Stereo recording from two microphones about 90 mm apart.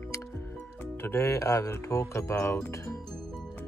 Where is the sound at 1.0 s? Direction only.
30° left (ahead or behind).